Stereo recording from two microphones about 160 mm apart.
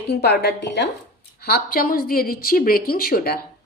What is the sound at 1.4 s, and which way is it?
A woman's voice, 80° left.